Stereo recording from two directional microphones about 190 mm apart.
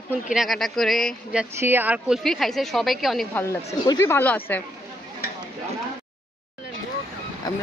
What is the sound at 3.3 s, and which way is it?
Speech, 15° left (ahead or behind).